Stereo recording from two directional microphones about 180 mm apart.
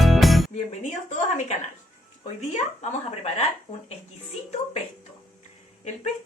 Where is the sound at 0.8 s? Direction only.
40° left (ahead or behind).